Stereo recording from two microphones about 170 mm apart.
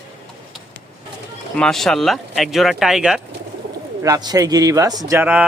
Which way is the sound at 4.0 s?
20° right (ahead or behind).